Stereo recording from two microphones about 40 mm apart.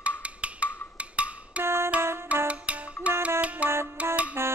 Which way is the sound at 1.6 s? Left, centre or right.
Right.